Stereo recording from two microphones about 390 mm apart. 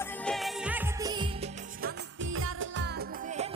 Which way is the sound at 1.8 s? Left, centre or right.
Right.